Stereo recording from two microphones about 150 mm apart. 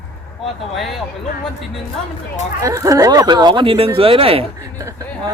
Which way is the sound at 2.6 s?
20° right (ahead or behind).